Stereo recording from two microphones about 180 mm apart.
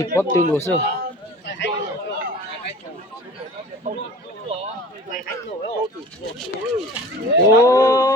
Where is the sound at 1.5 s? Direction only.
75° left (ahead or behind).